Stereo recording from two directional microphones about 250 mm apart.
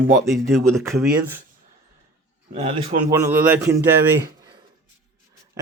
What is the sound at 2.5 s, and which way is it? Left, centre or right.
Speech, right.